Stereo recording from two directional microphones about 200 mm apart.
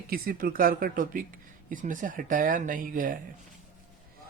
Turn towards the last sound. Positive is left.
turn(degrees=-45)  # may be behind; listen again after turning